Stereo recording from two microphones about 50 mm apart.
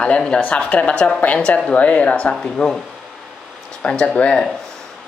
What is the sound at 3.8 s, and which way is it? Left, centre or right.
Speech, centre.